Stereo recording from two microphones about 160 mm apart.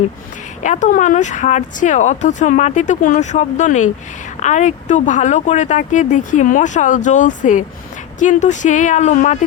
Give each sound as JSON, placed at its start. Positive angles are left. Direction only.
{"t": 0.6, "sound": "speech", "side_deg": 50}